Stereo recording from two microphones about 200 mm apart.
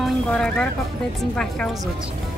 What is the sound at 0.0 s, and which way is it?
A woman's voice, 5° left (ahead or behind).